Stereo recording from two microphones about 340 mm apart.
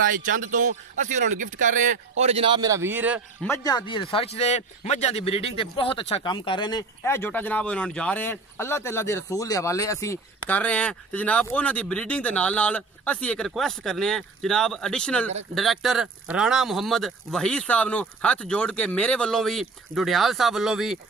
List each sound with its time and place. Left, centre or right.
0.1 s speech: right; by 3.2 s centre
3.4 s speech: centre